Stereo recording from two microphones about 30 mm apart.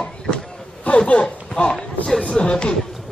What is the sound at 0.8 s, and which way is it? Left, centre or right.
Speech, left.